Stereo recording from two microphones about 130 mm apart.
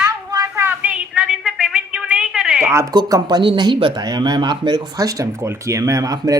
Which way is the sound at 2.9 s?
35° right (ahead or behind).